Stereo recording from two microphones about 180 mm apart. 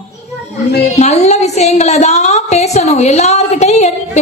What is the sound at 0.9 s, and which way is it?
A woman's voice, 40° left (ahead or behind).